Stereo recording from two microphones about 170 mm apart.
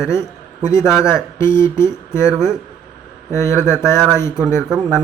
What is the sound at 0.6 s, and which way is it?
A man's voice, 20° left (ahead or behind).